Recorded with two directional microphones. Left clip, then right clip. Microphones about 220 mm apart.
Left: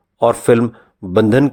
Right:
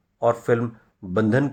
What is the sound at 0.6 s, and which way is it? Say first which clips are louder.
Speech: left 10 dB; 20° left (ahead or behind).